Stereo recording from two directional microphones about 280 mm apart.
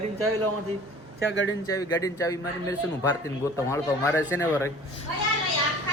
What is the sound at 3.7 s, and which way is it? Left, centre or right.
Speech, centre.